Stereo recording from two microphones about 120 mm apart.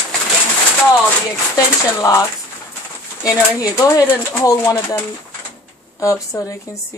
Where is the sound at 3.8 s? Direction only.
25° left (ahead or behind).